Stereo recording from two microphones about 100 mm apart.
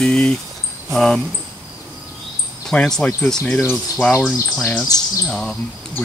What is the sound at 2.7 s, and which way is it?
Speech, 5° left (ahead or behind).